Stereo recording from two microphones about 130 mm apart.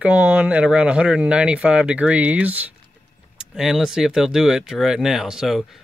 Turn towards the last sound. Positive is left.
turn(degrees=0)  # may be behind; listen again after turning